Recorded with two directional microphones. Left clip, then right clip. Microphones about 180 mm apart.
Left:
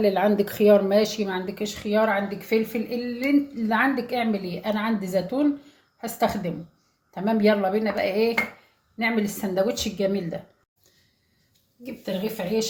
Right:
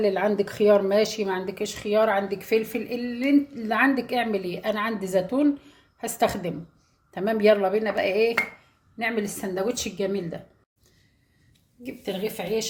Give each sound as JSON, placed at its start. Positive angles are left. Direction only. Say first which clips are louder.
{"t": 0.0, "sound": "a woman's voice", "louder": "left 2 dB", "side_deg": -10}
{"t": 11.8, "sound": "a woman's voice", "louder": "even", "side_deg": -50}